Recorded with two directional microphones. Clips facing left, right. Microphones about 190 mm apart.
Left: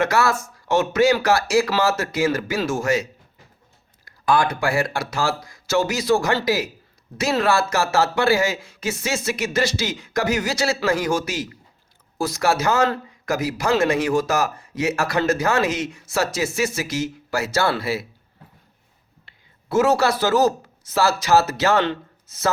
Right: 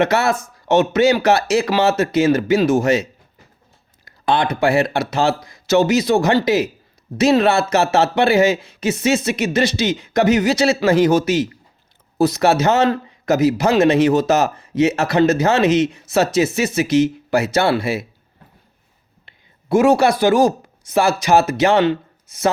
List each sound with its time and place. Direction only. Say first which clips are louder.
0.0 s speech: right 3 dB; 20° right (ahead or behind)
19.2 s speech: right 4 dB; 15° right (ahead or behind)